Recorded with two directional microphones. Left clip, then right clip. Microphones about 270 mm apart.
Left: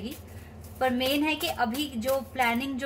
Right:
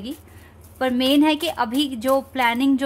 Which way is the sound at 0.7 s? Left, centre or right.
Right.